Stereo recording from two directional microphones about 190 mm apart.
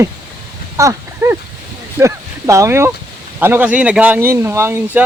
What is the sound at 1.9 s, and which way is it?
Speech, 15° right (ahead or behind).